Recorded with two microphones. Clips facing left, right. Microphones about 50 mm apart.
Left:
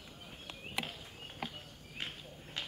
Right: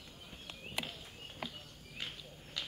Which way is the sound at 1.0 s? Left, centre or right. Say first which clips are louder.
Left 2 dB; centre.